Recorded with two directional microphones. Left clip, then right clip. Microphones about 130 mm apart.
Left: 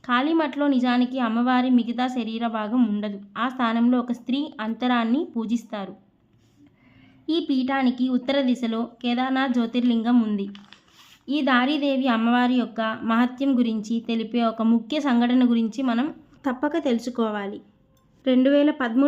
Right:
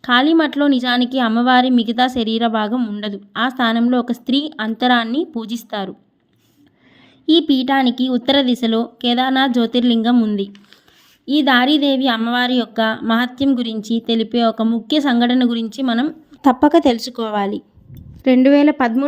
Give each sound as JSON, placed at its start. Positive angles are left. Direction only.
{"t": 0.0, "sound": "a woman's voice", "side_deg": -50}
{"t": 2.7, "sound": "speech", "side_deg": -35}
{"t": 3.0, "sound": "a woman's voice", "side_deg": -50}
{"t": 7.3, "sound": "a woman's voice", "side_deg": -55}
{"t": 16.3, "sound": "a woman's voice", "side_deg": -55}